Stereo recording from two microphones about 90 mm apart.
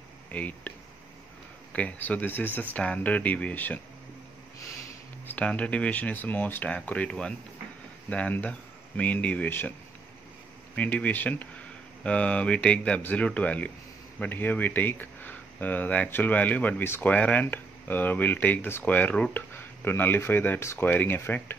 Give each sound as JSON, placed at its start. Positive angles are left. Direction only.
{"t": 0.3, "sound": "speech", "side_deg": 15}
{"t": 5.3, "sound": "speech", "side_deg": 15}
{"t": 10.8, "sound": "speech", "side_deg": 15}